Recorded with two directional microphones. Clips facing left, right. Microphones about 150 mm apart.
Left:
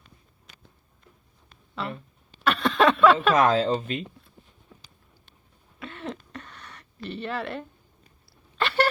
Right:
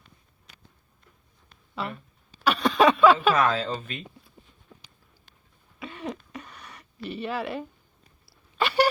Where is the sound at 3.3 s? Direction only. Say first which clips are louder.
Left 4 dB; 30° left (ahead or behind).